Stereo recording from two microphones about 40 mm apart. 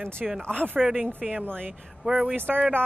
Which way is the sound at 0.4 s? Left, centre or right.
Left.